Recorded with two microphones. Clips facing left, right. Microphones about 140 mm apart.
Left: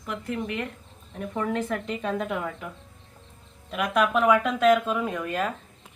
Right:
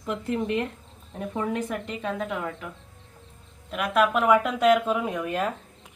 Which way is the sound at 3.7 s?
Centre (ahead or behind).